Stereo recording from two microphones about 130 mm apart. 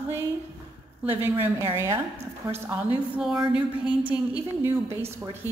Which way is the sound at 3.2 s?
5° right (ahead or behind).